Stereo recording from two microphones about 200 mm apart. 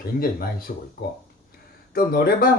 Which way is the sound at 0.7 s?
45° left (ahead or behind).